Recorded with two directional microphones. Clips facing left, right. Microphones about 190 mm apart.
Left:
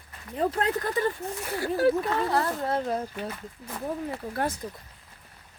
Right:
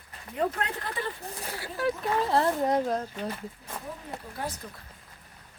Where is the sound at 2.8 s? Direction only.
5° left (ahead or behind).